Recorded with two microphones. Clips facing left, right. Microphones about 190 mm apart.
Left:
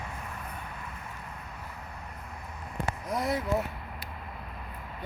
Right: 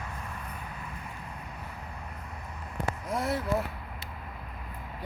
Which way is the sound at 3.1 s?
5° right (ahead or behind).